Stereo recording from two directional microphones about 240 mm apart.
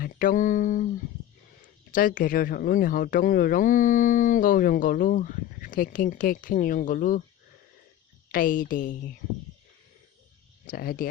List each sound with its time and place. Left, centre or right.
0.0 s speech: left
1.9 s speech: left
8.3 s speech: left
10.7 s speech: left